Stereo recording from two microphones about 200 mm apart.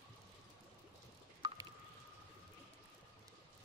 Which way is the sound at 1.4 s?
20° right (ahead or behind).